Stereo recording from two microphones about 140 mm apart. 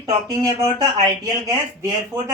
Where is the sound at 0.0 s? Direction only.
25° right (ahead or behind).